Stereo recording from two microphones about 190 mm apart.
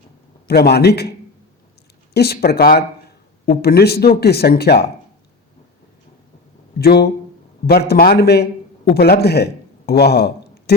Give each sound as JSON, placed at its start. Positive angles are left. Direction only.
{"t": 0.4, "sound": "speech", "side_deg": 55}
{"t": 2.1, "sound": "speech", "side_deg": 55}
{"t": 6.7, "sound": "a man's voice", "side_deg": 55}